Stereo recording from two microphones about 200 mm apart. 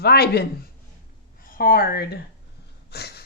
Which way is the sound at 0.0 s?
50° left (ahead or behind).